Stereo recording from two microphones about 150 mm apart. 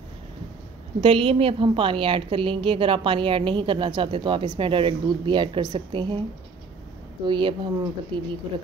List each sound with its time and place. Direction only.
1.0 s a woman's voice: 35° right (ahead or behind)
7.2 s a woman's voice: 35° right (ahead or behind)